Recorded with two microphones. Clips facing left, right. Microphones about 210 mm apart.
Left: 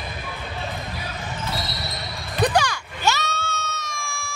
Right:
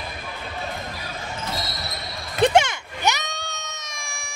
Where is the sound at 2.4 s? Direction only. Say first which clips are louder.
Right 3 dB; 25° right (ahead or behind).